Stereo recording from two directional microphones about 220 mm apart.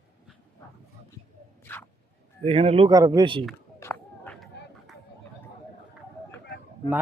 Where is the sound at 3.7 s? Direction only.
10° left (ahead or behind).